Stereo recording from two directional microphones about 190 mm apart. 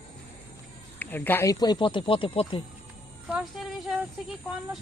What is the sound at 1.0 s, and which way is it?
Speech, 10° left (ahead or behind).